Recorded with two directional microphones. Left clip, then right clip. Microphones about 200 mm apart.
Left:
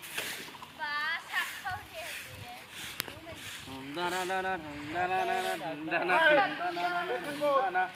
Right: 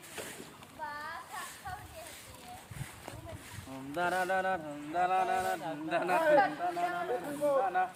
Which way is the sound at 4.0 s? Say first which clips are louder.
Right 2 dB; 30° right (ahead or behind).